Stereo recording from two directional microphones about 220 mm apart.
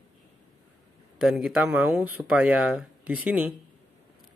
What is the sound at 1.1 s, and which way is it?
Speech, centre (ahead or behind).